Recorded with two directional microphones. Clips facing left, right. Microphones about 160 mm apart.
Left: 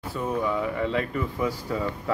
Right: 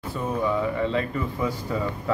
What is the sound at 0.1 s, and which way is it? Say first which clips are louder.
Speech: right 1 dB; 5° left (ahead or behind).